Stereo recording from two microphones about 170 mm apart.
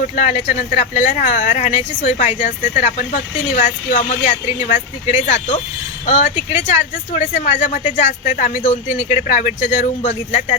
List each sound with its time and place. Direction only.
0.2 s speech: 40° left (ahead or behind)